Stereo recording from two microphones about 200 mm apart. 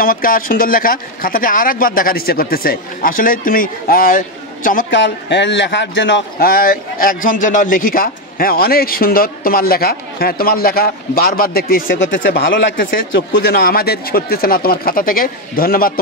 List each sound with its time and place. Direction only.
0.0 s a man's voice: 45° left (ahead or behind)
4.9 s a man's voice: 65° left (ahead or behind); by 11.8 s 50° left (ahead or behind)
11.9 s speech: 65° left (ahead or behind)
12.2 s a man's voice: 50° left (ahead or behind)